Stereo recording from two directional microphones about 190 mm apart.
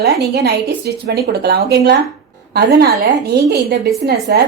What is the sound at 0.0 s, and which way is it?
Speech, 55° right (ahead or behind).